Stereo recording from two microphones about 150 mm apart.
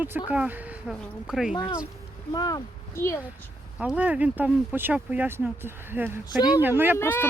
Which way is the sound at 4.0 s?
10° right (ahead or behind).